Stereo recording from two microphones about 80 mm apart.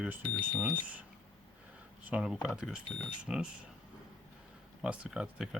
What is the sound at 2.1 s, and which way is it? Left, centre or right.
Speech, centre.